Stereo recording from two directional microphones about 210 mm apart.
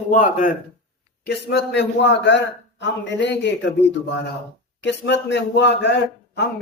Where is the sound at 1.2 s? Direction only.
50° left (ahead or behind).